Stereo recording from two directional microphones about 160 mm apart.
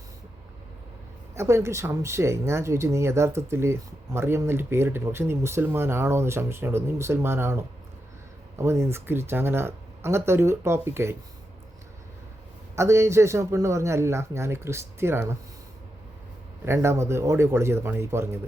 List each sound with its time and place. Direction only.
1.4 s speech: 15° right (ahead or behind)
12.7 s speech: 15° right (ahead or behind)
16.6 s speech: 15° right (ahead or behind)